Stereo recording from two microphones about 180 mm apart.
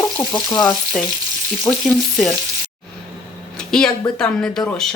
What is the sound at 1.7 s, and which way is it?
Frying, 15° left (ahead or behind).